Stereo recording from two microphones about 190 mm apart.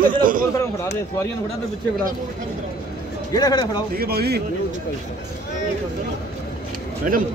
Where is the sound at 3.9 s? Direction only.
55° right (ahead or behind).